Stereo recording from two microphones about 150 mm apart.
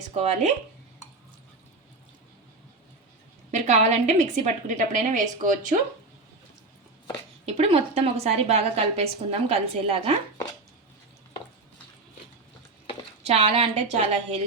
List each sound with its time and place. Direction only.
0.1 s a woman's voice: 50° right (ahead or behind)
3.5 s a woman's voice: 50° right (ahead or behind)
7.4 s a woman's voice: 40° right (ahead or behind)
13.2 s a woman's voice: 45° right (ahead or behind)